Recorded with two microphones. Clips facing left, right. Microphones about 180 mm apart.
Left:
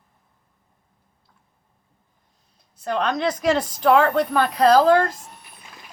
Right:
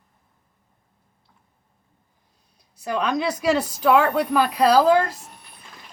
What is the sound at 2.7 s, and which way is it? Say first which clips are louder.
Speech: even; 10° right (ahead or behind).